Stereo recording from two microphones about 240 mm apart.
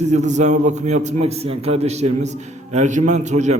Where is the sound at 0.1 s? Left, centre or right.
Right.